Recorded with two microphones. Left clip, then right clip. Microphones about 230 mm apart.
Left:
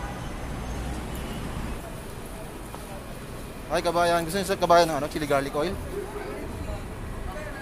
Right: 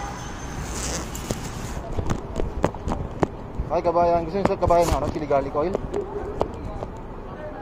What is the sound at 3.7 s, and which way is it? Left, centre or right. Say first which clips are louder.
Speech: right 3 dB; left.